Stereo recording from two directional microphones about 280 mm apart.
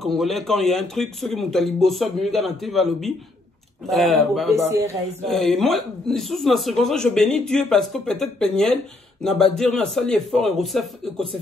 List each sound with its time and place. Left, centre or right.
0.2 s speech: centre
4.6 s speech: centre
5.2 s speech: centre